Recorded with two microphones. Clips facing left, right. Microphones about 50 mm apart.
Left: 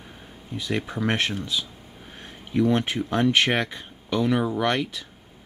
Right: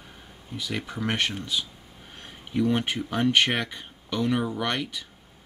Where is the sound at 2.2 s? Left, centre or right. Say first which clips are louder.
Left 3 dB; centre.